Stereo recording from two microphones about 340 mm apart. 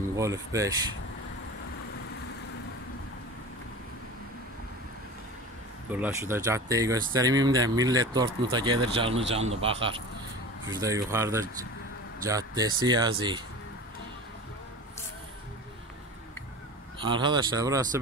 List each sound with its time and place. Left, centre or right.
0.1 s speech: centre
5.9 s speech: centre
17.0 s speech: centre